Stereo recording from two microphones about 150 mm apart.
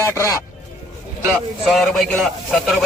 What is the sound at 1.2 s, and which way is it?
A man's voice, centre (ahead or behind).